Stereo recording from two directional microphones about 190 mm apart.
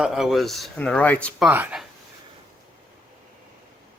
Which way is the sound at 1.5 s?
10° right (ahead or behind).